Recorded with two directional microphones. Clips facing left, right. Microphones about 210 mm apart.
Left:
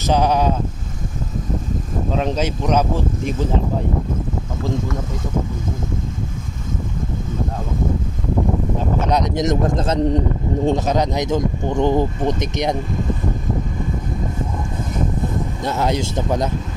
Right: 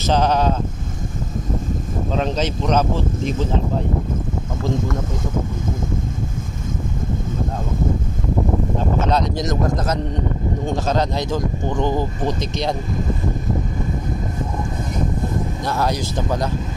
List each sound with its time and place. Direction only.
0.0 s speech: 10° left (ahead or behind)
2.2 s speech: 10° left (ahead or behind)
9.0 s speech: 15° left (ahead or behind); by 10.7 s 30° left (ahead or behind)
10.9 s speech: 15° left (ahead or behind)
15.6 s speech: 20° left (ahead or behind)